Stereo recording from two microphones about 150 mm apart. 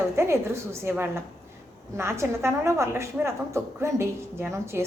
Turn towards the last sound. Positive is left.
turn(degrees=-15)  # may be behind; listen again after turning